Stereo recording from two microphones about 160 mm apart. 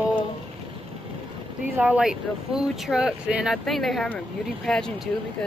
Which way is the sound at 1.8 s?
5° right (ahead or behind).